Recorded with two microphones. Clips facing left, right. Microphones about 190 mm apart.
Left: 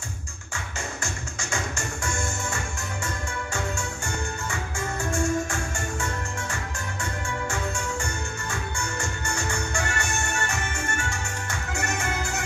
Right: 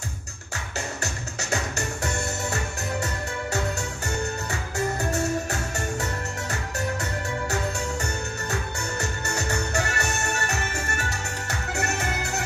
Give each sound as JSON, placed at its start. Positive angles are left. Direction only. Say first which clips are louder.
{"t": 1.0, "sound": "music", "louder": "right 2 dB", "side_deg": -40}
{"t": 4.5, "sound": "music", "louder": "right 3 dB", "side_deg": -40}
{"t": 7.5, "sound": "music", "louder": "right 2 dB", "side_deg": -40}
{"t": 12.0, "sound": "music", "louder": "right 1 dB", "side_deg": -35}